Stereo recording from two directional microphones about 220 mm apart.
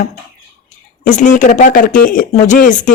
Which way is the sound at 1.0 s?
35° left (ahead or behind).